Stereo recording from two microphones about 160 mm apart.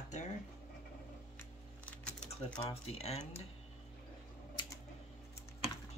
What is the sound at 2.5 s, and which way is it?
Speech, 40° left (ahead or behind).